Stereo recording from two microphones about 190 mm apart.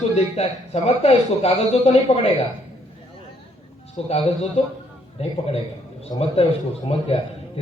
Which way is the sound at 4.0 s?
30° left (ahead or behind).